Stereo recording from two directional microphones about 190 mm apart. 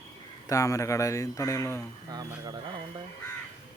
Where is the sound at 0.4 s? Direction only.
15° left (ahead or behind).